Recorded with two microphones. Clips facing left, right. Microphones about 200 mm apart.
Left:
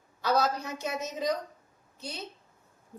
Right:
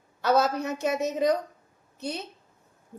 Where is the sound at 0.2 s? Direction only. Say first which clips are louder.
Right 4 dB; 65° right (ahead or behind).